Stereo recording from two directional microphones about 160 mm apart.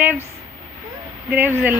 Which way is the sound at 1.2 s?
10° right (ahead or behind).